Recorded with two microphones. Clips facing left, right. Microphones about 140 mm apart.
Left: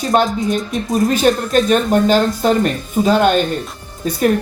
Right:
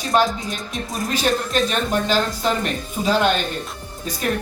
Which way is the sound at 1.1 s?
50° left (ahead or behind).